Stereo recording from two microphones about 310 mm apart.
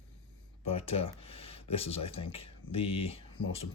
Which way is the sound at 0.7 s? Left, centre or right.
Centre.